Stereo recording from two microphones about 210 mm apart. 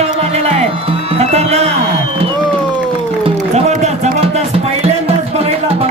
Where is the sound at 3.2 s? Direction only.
30° right (ahead or behind).